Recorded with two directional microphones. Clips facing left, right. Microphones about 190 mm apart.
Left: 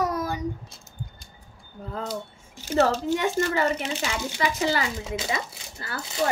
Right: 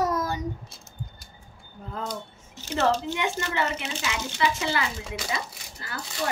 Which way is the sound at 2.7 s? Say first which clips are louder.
Left 3 dB; 40° left (ahead or behind).